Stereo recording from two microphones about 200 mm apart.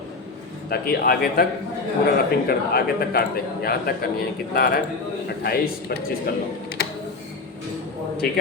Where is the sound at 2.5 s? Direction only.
50° left (ahead or behind).